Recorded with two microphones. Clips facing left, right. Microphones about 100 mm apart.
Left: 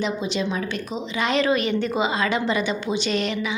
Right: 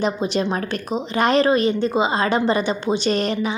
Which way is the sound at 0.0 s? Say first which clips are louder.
Right 4 dB; 45° right (ahead or behind).